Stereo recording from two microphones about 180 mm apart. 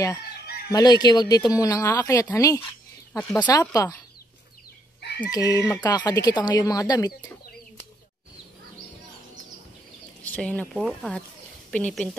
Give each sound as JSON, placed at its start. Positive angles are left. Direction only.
{"t": 0.7, "sound": "speech", "side_deg": 20}
{"t": 3.1, "sound": "speech", "side_deg": 5}
{"t": 3.3, "sound": "speech", "side_deg": 20}
{"t": 5.3, "sound": "speech", "side_deg": 20}
{"t": 10.2, "sound": "speech", "side_deg": 5}